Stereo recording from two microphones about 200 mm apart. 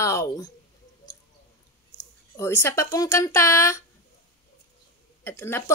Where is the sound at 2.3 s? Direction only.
15° left (ahead or behind).